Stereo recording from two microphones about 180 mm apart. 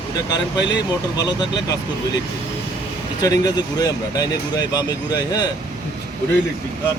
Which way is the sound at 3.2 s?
20° left (ahead or behind).